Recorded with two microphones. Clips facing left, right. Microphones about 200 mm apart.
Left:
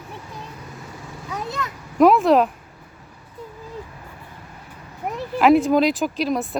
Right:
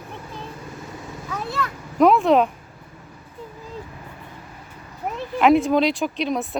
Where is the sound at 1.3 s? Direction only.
20° left (ahead or behind).